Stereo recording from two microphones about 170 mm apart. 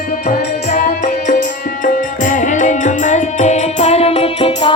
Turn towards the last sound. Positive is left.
turn(degrees=35)  # may be behind; listen again after turning